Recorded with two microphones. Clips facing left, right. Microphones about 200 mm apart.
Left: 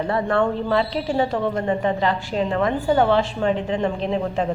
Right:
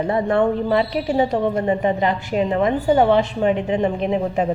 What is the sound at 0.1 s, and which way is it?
A woman's voice, 20° right (ahead or behind).